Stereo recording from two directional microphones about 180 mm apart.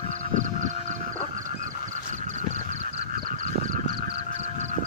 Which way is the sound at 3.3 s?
45° right (ahead or behind).